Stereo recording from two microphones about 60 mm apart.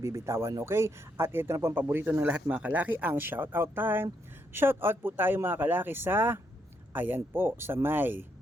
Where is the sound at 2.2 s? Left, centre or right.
Right.